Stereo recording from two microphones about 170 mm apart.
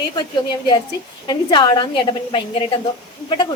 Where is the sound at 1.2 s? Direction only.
30° left (ahead or behind).